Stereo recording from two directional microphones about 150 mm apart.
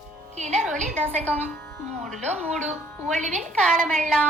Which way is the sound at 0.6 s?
5° left (ahead or behind).